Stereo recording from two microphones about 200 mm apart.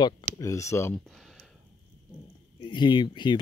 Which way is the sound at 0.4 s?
15° left (ahead or behind).